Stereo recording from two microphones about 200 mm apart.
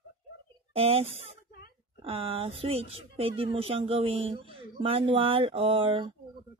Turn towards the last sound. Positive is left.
turn(degrees=-25)  # may be behind; listen again after turning